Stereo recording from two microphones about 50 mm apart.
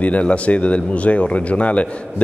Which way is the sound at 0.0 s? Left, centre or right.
Left.